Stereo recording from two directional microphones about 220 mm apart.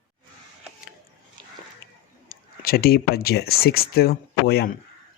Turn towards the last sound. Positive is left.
turn(degrees=45)  # may be behind; listen again after turning